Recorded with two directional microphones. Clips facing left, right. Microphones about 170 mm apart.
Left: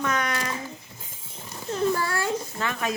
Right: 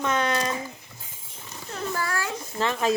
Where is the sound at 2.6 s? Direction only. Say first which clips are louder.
Right 10 dB; 30° right (ahead or behind).